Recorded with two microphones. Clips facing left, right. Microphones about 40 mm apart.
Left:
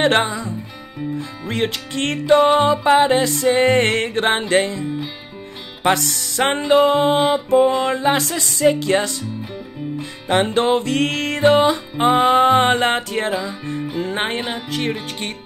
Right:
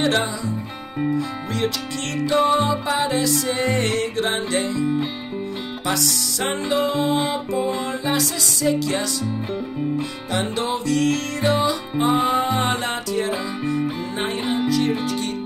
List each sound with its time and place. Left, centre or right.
0.0 s music: left
5.9 s music: left
10.3 s music: left